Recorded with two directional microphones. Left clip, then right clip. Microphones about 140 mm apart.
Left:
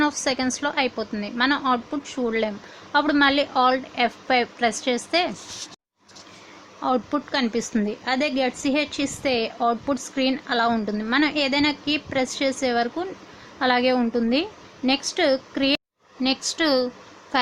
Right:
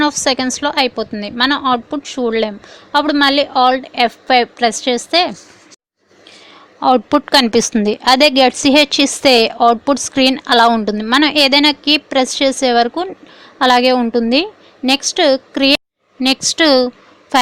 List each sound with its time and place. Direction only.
0.0 s a woman's voice: 45° right (ahead or behind)
6.7 s a woman's voice: 50° right (ahead or behind)